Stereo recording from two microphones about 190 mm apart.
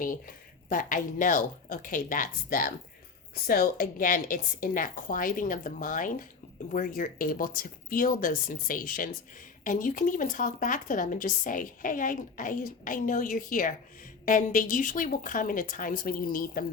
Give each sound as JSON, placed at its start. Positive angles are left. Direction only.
{"t": 0.0, "sound": "speech", "side_deg": 45}